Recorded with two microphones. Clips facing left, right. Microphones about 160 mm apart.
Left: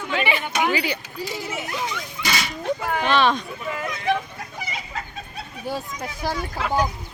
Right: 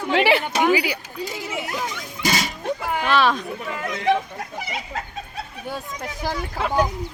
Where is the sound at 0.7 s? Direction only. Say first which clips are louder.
Right 4 dB; 10° right (ahead or behind).